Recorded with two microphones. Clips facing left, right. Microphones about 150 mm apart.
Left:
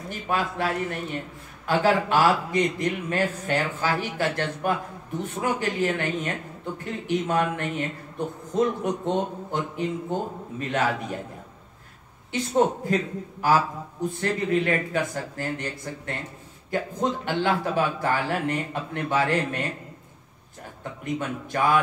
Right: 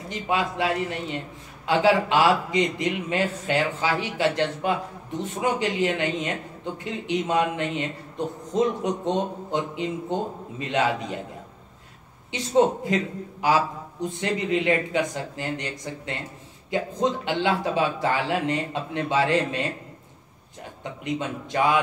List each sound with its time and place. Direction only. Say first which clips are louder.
0.1 s speech: right 2 dB; 15° right (ahead or behind)
12.3 s speech: right 2 dB; 15° right (ahead or behind)
21.0 s speech: even; 20° right (ahead or behind)